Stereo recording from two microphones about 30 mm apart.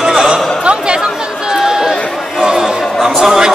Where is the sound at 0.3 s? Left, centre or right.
Right.